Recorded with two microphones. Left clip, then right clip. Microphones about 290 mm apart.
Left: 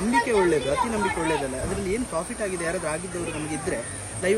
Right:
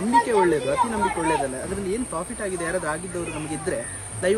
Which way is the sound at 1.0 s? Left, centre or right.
Right.